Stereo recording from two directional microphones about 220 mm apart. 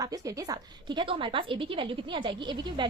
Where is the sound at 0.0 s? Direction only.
15° right (ahead or behind).